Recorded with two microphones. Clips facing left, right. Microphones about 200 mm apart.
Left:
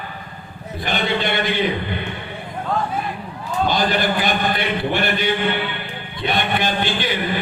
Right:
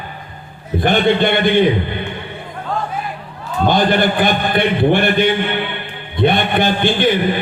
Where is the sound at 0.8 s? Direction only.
55° right (ahead or behind).